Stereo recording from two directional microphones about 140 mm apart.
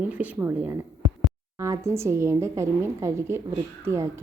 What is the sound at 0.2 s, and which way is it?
A woman's voice, 15° right (ahead or behind).